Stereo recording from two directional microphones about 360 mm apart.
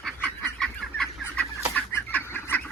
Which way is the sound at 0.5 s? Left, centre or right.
Centre.